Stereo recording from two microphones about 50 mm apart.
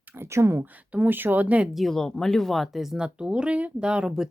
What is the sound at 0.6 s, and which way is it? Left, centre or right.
Speech, right.